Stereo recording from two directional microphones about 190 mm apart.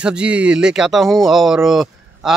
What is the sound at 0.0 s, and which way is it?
Speech, 5° right (ahead or behind).